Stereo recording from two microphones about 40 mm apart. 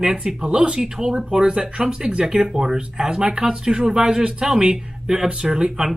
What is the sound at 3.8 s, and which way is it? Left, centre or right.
Speech, right.